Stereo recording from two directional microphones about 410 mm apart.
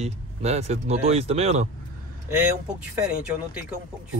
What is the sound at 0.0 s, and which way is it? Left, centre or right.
Speech, centre.